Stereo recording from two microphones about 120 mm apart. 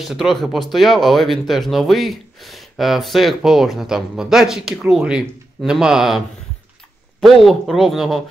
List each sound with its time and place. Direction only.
0.0 s speech: centre (ahead or behind)